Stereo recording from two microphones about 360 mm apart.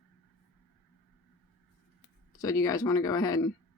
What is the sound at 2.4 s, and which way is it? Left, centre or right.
Speech, centre.